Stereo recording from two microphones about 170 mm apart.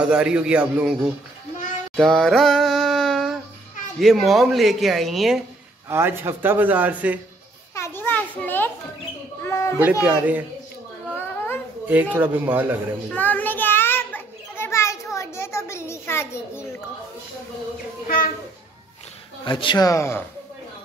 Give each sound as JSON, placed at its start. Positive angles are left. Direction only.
{"t": 0.0, "sound": "speech", "side_deg": -5}
{"t": 2.0, "sound": "a sound", "side_deg": 0}
{"t": 4.0, "sound": "speech", "side_deg": 0}
{"t": 5.9, "sound": "a man's voice", "side_deg": -15}
{"t": 7.7, "sound": "children playing", "side_deg": 15}
{"t": 9.4, "sound": "a sound", "side_deg": 15}
{"t": 10.0, "sound": "a man's voice", "side_deg": -10}
{"t": 11.9, "sound": "a man's voice", "side_deg": -10}
{"t": 13.1, "sound": "a sound", "side_deg": 10}
{"t": 18.0, "sound": "a child's voice", "side_deg": 55}
{"t": 19.4, "sound": "a man's voice", "side_deg": 30}